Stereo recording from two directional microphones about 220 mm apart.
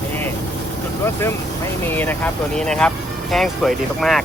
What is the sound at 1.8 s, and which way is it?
Speech, 10° left (ahead or behind).